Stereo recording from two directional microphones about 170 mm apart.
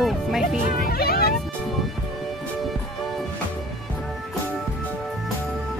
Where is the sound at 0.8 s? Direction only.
65° left (ahead or behind).